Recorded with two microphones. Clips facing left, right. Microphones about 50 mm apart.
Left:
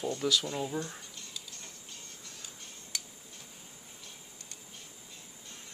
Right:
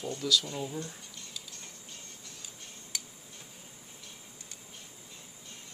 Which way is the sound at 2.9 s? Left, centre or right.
Centre.